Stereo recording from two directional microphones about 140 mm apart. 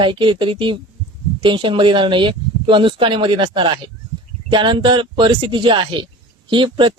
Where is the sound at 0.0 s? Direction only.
35° right (ahead or behind).